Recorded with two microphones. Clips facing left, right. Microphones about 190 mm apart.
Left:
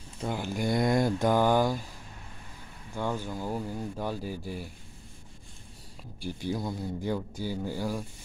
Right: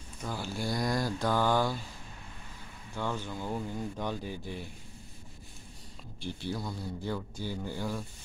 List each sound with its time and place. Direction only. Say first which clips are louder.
0.2 s speech: left 5 dB; 20° left (ahead or behind)
2.9 s speech: left 3 dB; 15° left (ahead or behind)
6.2 s speech: left 4 dB; 15° left (ahead or behind)